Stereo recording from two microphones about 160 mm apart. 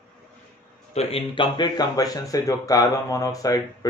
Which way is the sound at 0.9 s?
40° left (ahead or behind).